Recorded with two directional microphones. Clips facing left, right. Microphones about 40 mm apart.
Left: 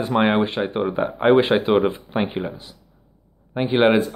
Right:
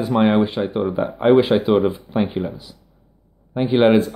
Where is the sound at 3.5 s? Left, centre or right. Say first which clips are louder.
Right 2 dB; left.